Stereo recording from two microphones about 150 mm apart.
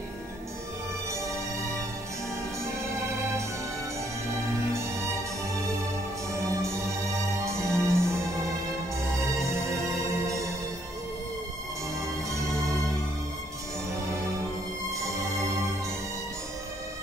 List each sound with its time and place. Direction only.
6.4 s music: 20° right (ahead or behind)
15.0 s music: 20° right (ahead or behind)